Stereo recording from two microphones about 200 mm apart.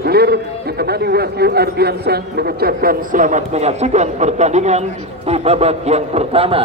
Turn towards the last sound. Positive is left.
turn(degrees=-30)  # may be behind; listen again after turning